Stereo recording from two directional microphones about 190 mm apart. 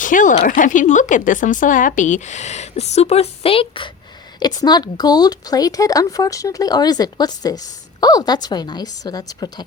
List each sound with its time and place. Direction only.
0.0 s speech: 45° left (ahead or behind); by 9.6 s 20° left (ahead or behind)